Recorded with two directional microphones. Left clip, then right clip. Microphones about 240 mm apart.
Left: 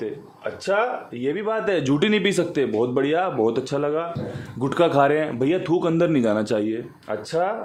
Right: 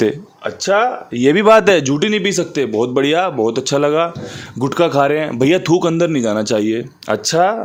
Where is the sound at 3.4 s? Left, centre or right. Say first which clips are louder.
Right 6 dB; centre.